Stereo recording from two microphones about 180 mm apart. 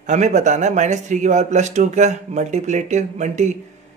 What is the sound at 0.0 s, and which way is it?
A man's voice, 40° right (ahead or behind).